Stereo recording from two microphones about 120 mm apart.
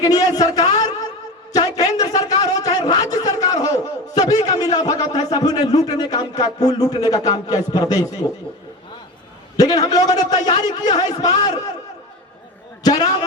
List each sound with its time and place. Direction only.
0.0 s a man's voice: 30° left (ahead or behind)
0.8 s a sound: 30° left (ahead or behind)
4.4 s a man's voice: 30° left (ahead or behind)
9.6 s a man's voice: 35° left (ahead or behind)
12.8 s a man's voice: 35° left (ahead or behind)